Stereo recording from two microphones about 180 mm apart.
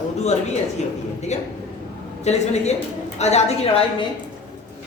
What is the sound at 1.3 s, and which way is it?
A woman's voice, 40° left (ahead or behind).